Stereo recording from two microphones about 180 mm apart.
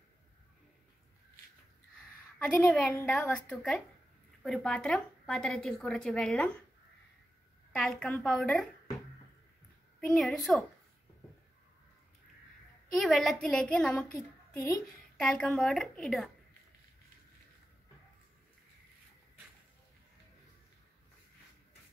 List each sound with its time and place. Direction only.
2.3 s a woman's voice: 5° left (ahead or behind)
7.8 s a woman's voice: 5° left (ahead or behind)
9.9 s a woman's voice: centre (ahead or behind)
12.9 s a woman's voice: centre (ahead or behind)
15.1 s a woman's voice: 5° left (ahead or behind)